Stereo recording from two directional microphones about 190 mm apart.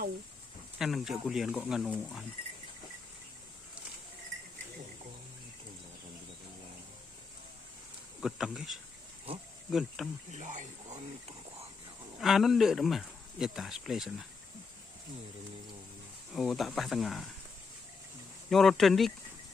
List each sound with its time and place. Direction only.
0.8 s speech: centre (ahead or behind)
8.2 s speech: centre (ahead or behind)
10.3 s speech: 40° right (ahead or behind)
12.2 s speech: centre (ahead or behind)
16.3 s speech: centre (ahead or behind)
18.5 s speech: centre (ahead or behind)